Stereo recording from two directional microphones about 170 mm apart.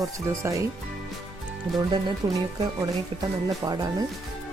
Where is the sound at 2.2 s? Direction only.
20° right (ahead or behind).